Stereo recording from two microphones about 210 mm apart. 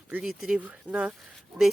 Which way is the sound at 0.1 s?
5° right (ahead or behind).